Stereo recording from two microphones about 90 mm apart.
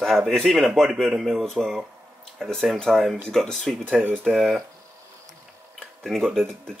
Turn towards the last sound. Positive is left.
turn(degrees=5)  # may be behind; listen again after turning